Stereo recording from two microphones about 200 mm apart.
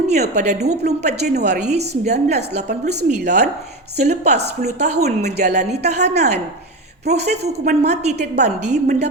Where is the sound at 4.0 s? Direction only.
35° right (ahead or behind).